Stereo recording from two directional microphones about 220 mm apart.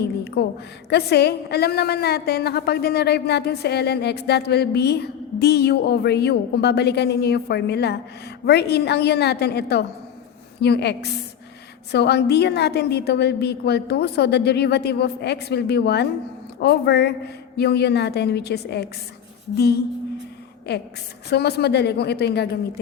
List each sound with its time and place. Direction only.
0.0 s a woman's voice: 50° left (ahead or behind)